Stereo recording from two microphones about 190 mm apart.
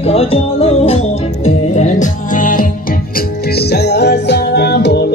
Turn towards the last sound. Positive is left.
turn(degrees=60)  # may be behind; listen again after turning